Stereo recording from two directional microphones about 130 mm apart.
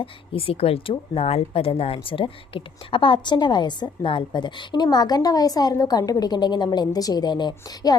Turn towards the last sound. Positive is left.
turn(degrees=30)  # may be behind; listen again after turning